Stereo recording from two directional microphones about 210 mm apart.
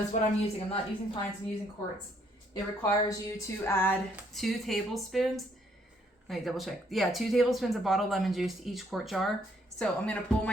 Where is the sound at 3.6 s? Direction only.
10° left (ahead or behind).